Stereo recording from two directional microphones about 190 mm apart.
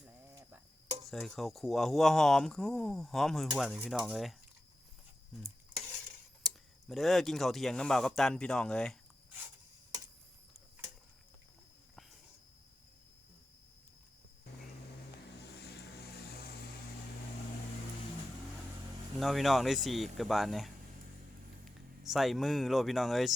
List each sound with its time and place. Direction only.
1.1 s speech: centre (ahead or behind)
6.4 s speech: centre (ahead or behind)
15.4 s vehicle: 60° left (ahead or behind)
19.2 s speech: centre (ahead or behind)